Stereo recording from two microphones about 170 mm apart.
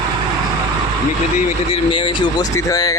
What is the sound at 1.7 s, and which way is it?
Speech, 30° left (ahead or behind).